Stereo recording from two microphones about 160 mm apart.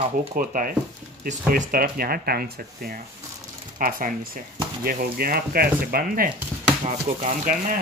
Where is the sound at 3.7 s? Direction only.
60° right (ahead or behind).